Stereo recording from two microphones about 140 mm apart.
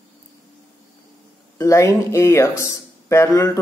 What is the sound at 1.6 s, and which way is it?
Speech, 20° left (ahead or behind).